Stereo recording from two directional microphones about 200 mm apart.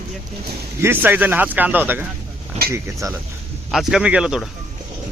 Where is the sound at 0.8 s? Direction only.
10° right (ahead or behind).